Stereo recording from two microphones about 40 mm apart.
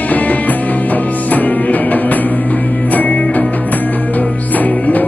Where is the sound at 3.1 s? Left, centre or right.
Left.